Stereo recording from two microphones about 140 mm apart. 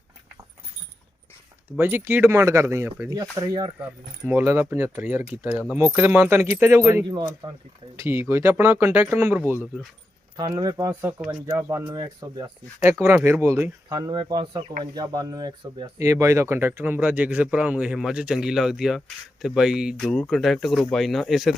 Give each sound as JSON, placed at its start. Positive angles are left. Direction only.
{"t": 1.8, "sound": "speech", "side_deg": -15}
{"t": 4.3, "sound": "speech", "side_deg": -15}
{"t": 7.4, "sound": "speech", "side_deg": -35}
{"t": 7.9, "sound": "speech", "side_deg": -15}
{"t": 10.3, "sound": "speech", "side_deg": -30}
{"t": 11.3, "sound": "speech", "side_deg": -15}
{"t": 13.9, "sound": "speech", "side_deg": -35}